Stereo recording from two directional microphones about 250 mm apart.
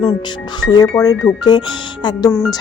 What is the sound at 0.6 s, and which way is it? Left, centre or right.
A woman's voice, centre.